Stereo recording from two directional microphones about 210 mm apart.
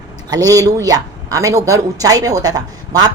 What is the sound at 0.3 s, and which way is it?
A woman's voice, 15° right (ahead or behind).